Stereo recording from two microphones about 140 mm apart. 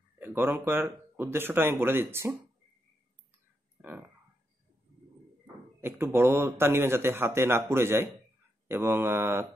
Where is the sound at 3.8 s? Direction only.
15° right (ahead or behind).